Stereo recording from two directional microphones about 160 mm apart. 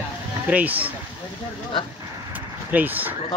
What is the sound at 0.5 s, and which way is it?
Speech, 10° right (ahead or behind).